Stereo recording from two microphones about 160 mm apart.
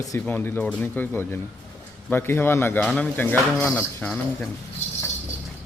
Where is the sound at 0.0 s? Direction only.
15° left (ahead or behind).